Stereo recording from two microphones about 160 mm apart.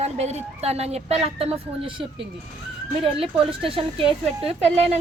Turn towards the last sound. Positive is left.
turn(degrees=-40)  # may be behind; listen again after turning